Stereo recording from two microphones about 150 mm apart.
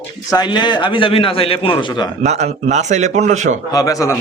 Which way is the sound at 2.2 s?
50° right (ahead or behind).